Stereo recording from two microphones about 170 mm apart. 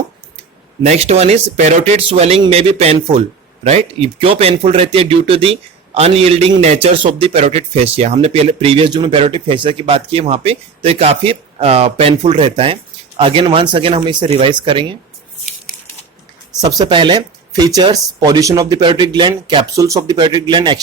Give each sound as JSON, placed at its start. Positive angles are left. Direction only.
{"t": 0.8, "sound": "speech", "side_deg": -40}
{"t": 16.6, "sound": "speech", "side_deg": -20}